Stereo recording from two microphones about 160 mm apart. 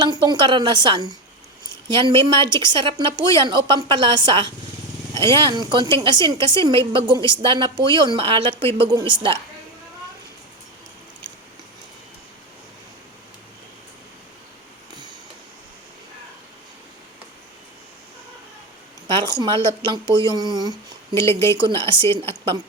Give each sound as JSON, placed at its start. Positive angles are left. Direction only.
{"t": 0.0, "sound": "a woman's voice", "side_deg": -25}
{"t": 19.0, "sound": "speech", "side_deg": -30}
{"t": 21.3, "sound": "speech", "side_deg": 15}
{"t": 21.6, "sound": "a woman's voice", "side_deg": -30}